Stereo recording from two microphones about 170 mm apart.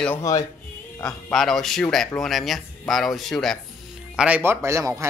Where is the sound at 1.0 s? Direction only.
Centre (ahead or behind).